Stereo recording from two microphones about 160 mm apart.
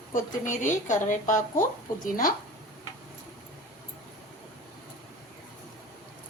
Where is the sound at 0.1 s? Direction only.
55° left (ahead or behind).